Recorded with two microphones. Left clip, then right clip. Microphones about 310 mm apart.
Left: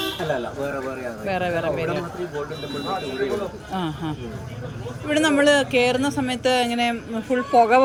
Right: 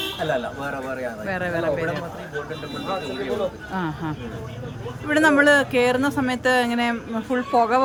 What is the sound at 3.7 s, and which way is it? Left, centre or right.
Speech, centre.